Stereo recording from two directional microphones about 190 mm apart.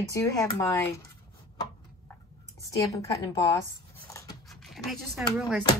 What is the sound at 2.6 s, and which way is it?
Speech, 15° left (ahead or behind).